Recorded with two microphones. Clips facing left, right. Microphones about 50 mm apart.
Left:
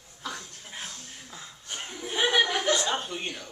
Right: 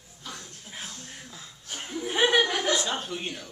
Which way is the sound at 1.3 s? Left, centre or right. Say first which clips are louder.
Left 1 dB; centre.